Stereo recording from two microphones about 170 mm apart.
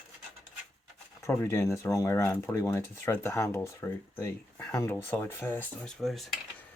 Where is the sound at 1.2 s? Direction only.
15° left (ahead or behind).